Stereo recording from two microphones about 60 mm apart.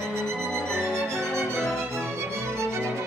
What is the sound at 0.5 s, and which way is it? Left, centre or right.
Music, centre.